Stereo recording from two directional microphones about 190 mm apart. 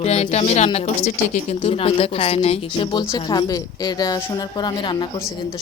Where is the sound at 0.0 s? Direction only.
35° left (ahead or behind).